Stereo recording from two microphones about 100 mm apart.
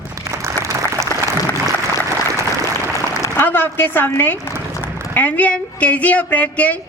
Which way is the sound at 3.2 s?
20° left (ahead or behind).